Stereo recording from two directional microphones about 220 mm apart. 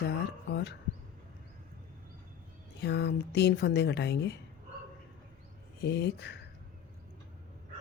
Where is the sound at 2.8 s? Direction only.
50° left (ahead or behind).